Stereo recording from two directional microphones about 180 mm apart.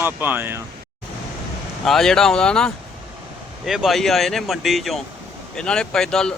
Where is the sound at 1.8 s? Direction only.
Centre (ahead or behind).